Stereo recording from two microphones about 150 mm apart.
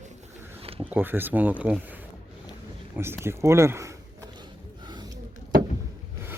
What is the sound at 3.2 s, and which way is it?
Speech, 20° right (ahead or behind).